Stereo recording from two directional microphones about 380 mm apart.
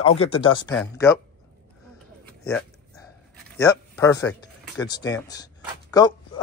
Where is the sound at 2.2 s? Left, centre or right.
Centre.